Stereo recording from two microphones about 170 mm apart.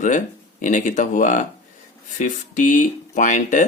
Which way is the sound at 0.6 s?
50° left (ahead or behind).